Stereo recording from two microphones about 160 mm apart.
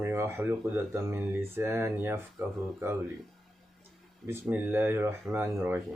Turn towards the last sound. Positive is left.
turn(degrees=-10)  # may be behind; listen again after turning